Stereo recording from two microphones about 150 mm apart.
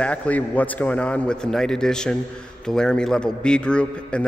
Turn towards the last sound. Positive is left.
turn(degrees=5)  # may be behind; listen again after turning